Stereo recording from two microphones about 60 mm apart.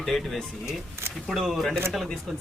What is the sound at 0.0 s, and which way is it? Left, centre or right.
Speech, centre.